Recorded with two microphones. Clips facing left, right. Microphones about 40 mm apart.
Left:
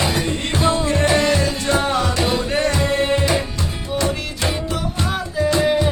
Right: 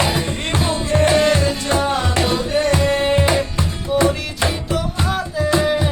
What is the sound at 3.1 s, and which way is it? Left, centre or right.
Music, right.